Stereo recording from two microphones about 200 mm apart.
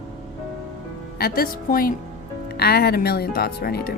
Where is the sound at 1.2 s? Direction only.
45° left (ahead or behind).